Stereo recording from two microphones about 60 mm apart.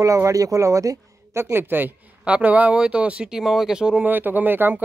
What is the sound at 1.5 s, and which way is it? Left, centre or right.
Speech, right.